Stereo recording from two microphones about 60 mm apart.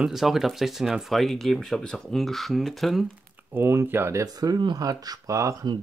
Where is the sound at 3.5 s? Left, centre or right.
Right.